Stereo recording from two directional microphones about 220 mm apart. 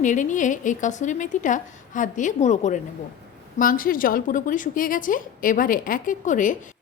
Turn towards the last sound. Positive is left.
turn(degrees=35)  # may be behind; listen again after turning